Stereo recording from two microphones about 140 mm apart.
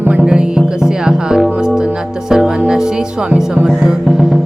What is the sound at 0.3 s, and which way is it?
Music, 5° right (ahead or behind).